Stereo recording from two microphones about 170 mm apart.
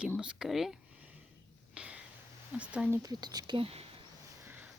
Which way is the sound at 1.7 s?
5° right (ahead or behind).